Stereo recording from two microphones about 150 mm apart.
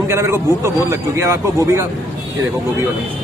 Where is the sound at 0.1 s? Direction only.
20° right (ahead or behind).